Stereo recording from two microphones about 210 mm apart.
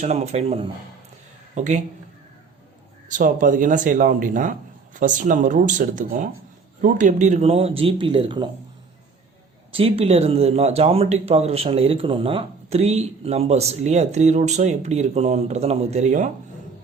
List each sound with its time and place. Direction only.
0.0 s speech: 30° right (ahead or behind)
3.1 s speech: 40° right (ahead or behind); by 8.4 s 25° right (ahead or behind)
9.7 s speech: 25° right (ahead or behind)